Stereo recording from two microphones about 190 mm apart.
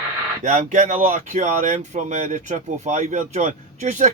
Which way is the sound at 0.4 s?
40° right (ahead or behind).